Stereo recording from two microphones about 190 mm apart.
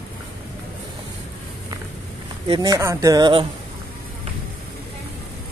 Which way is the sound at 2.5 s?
20° right (ahead or behind).